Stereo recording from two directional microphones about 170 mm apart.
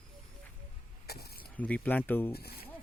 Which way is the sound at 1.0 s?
70° left (ahead or behind).